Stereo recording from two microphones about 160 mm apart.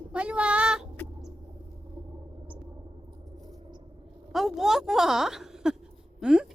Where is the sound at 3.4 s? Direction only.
35° right (ahead or behind).